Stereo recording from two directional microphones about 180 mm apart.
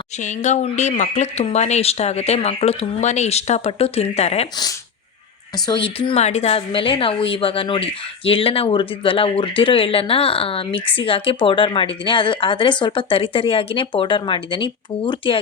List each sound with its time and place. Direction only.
0.2 s speech: 40° left (ahead or behind)
5.6 s a woman's voice: 30° left (ahead or behind)